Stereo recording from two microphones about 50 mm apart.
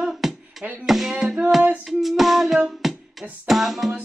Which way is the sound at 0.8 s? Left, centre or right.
Centre.